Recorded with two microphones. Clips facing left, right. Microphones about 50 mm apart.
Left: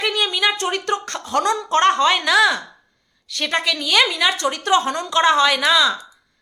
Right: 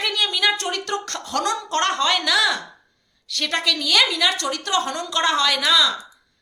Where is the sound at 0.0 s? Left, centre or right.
Centre.